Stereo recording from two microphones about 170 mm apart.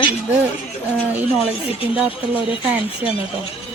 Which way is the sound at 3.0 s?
10° right (ahead or behind).